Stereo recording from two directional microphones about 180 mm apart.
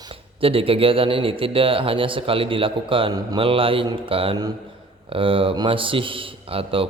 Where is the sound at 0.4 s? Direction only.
30° right (ahead or behind).